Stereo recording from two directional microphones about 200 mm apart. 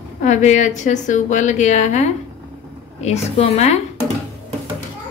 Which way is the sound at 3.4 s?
35° left (ahead or behind).